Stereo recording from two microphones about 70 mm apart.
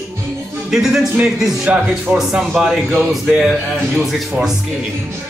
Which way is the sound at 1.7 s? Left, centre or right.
Centre.